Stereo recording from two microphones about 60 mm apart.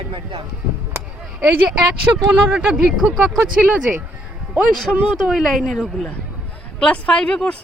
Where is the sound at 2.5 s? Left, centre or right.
Centre.